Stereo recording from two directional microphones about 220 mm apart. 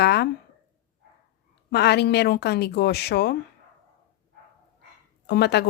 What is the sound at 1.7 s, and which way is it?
A woman's voice, 50° left (ahead or behind).